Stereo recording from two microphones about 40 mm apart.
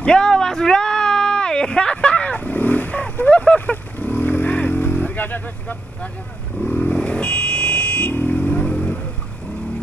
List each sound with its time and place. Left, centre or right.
0.0 s a sound: centre; by 3.0 s left
3.3 s speech: left
3.7 s vehicle: left
6.6 s speech: left
6.9 s a sound: left
8.3 s vehicle: left